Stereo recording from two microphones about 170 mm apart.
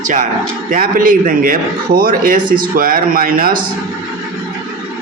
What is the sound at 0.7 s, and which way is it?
Speech, 55° right (ahead or behind).